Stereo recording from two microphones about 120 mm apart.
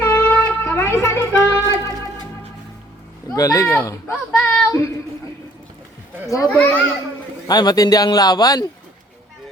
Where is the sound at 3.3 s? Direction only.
25° left (ahead or behind).